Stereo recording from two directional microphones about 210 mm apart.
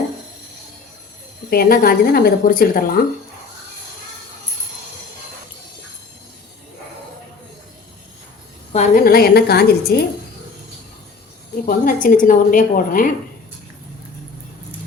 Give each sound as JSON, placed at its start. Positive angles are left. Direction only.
{"t": 1.5, "sound": "speech", "side_deg": 45}
{"t": 8.7, "sound": "speech", "side_deg": 35}
{"t": 11.6, "sound": "a woman's voice", "side_deg": 40}